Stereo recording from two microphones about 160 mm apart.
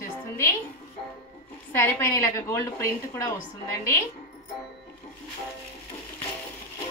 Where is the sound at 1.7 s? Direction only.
15° left (ahead or behind).